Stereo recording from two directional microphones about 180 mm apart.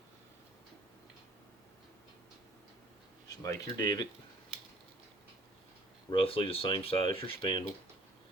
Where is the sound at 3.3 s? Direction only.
20° left (ahead or behind).